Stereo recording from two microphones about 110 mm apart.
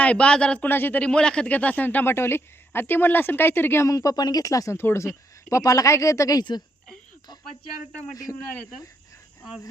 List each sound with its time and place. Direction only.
0.0 s speech: 10° left (ahead or behind); by 6.6 s 35° left (ahead or behind)
8.1 s a man's voice: 30° left (ahead or behind)